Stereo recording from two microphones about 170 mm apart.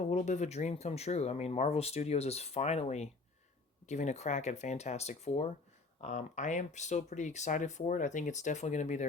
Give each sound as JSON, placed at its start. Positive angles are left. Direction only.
{"t": 0.1, "sound": "speech", "side_deg": 45}